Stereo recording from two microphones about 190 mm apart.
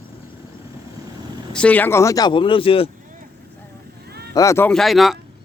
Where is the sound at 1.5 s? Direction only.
5° left (ahead or behind); by 2.9 s 30° left (ahead or behind).